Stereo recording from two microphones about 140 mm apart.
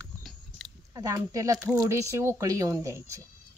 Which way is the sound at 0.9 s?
25° right (ahead or behind).